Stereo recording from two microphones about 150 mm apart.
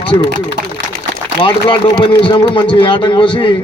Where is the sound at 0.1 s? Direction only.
55° right (ahead or behind).